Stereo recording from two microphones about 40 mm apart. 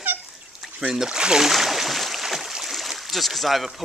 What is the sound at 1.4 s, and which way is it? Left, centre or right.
Boat, centre.